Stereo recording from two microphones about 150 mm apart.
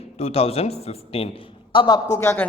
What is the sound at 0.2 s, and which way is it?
A man's voice, 45° left (ahead or behind).